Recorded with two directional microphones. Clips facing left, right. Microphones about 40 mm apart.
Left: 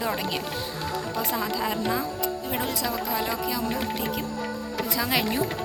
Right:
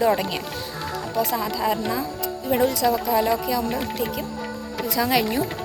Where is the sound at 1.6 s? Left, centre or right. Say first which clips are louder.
Right 3 dB; centre.